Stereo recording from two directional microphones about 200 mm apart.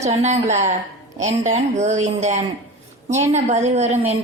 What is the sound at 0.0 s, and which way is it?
A woman's voice, 35° right (ahead or behind).